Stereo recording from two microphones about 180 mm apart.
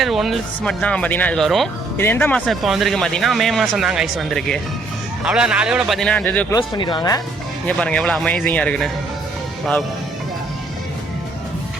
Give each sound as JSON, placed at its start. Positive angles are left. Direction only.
{"t": 0.0, "sound": "speech", "side_deg": 0}
{"t": 2.0, "sound": "speech", "side_deg": 10}
{"t": 2.5, "sound": "speech", "side_deg": 0}
{"t": 6.5, "sound": "speech", "side_deg": 25}
{"t": 7.7, "sound": "speech", "side_deg": 5}